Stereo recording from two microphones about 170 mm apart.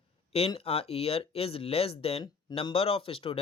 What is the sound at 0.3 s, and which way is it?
Speech, 35° left (ahead or behind).